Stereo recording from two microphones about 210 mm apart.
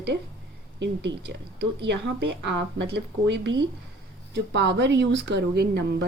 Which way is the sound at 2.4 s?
55° right (ahead or behind).